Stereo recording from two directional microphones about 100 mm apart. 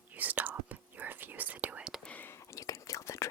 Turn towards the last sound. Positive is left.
turn(degrees=30)  # may be behind; listen again after turning